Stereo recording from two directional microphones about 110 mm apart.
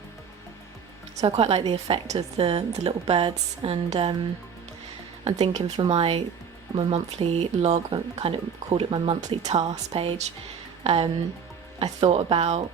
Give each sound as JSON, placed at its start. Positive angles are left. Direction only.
{"t": 1.4, "sound": "speech", "side_deg": -65}
{"t": 2.1, "sound": "a woman's voice", "side_deg": -65}
{"t": 5.2, "sound": "speech", "side_deg": -90}
{"t": 5.9, "sound": "a woman's voice", "side_deg": -60}
{"t": 8.1, "sound": "a woman's voice", "side_deg": -60}
{"t": 9.2, "sound": "a woman's voice", "side_deg": -80}